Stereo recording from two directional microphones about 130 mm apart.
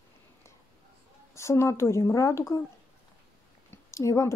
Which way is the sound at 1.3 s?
20° left (ahead or behind).